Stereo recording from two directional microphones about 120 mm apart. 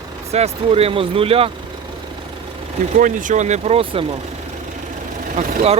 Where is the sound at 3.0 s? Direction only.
90° right; by 3.8 s 75° right (ahead or behind).